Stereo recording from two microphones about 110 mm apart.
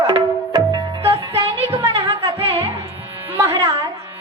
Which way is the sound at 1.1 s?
65° right (ahead or behind).